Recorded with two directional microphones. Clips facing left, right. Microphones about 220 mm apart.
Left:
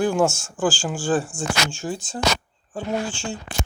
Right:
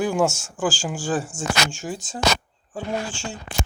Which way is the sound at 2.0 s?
45° right (ahead or behind).